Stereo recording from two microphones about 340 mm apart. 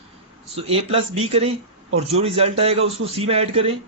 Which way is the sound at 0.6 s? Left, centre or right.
Centre.